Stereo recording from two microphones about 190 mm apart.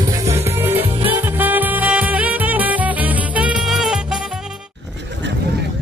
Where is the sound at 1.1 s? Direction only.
10° right (ahead or behind).